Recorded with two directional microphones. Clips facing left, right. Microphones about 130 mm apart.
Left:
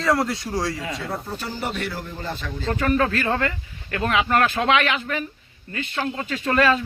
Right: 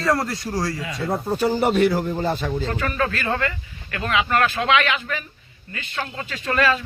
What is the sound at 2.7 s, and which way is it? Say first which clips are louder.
Speech: left 3 dB; 35° left (ahead or behind).